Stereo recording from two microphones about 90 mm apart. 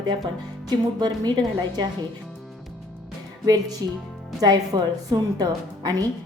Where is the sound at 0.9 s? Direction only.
45° right (ahead or behind).